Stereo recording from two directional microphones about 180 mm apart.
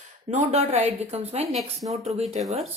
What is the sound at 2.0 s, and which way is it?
Speech, 35° right (ahead or behind).